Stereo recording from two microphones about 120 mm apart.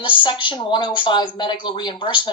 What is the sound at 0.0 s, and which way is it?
Speech, 45° left (ahead or behind).